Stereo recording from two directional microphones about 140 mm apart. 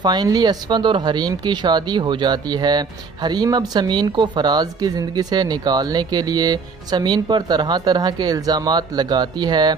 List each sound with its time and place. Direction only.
0.0 s speech: 30° right (ahead or behind)